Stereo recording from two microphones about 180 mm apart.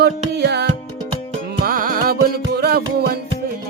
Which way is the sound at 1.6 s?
55° right (ahead or behind).